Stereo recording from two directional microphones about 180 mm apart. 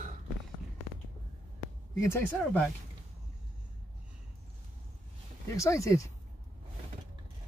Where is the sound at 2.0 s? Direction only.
15° left (ahead or behind).